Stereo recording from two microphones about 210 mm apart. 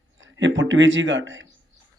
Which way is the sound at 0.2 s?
60° right (ahead or behind).